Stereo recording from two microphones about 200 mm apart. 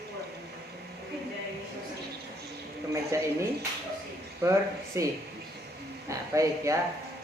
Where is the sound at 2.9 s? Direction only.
15° right (ahead or behind).